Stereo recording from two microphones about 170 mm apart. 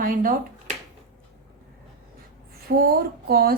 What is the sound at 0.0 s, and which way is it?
Speech, 55° right (ahead or behind).